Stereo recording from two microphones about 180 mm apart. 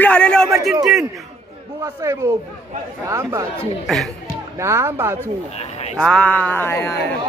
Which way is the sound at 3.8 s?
Centre (ahead or behind).